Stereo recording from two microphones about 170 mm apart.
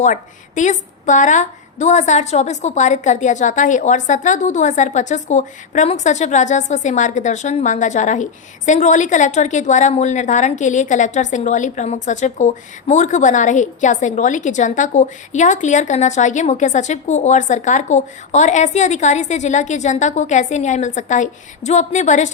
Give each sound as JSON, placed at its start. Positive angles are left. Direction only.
{"t": 0.0, "sound": "a woman's voice", "side_deg": 45}